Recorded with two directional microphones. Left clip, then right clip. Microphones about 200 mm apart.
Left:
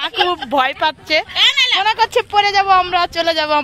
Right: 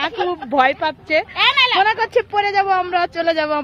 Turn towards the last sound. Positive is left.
turn(degrees=-10)  # may be behind; listen again after turning